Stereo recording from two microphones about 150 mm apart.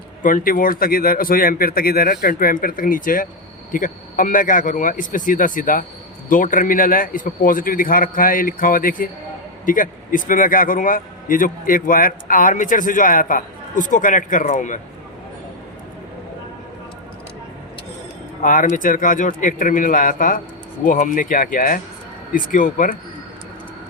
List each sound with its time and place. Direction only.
0.2 s a man's voice: 65° left (ahead or behind)
18.4 s a man's voice: 60° left (ahead or behind)